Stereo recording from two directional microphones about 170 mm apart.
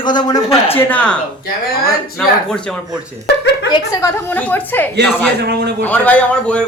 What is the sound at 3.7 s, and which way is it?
A woman's voice, 20° left (ahead or behind).